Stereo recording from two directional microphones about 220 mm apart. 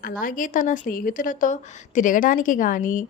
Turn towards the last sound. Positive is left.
turn(degrees=35)  # may be behind; listen again after turning